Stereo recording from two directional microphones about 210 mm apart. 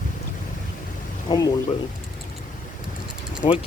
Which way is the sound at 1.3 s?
20° left (ahead or behind).